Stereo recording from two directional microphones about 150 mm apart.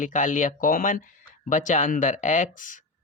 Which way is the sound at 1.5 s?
55° left (ahead or behind).